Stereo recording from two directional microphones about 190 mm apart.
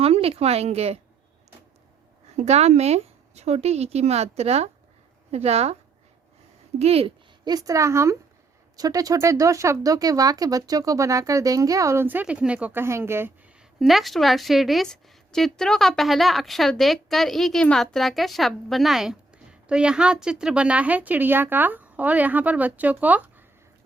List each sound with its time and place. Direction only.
0.0 s speech: 30° right (ahead or behind)
2.3 s a woman's voice: 35° right (ahead or behind)
6.7 s speech: 30° right (ahead or behind); by 13.3 s 10° right (ahead or behind)
13.7 s a woman's voice: centre (ahead or behind)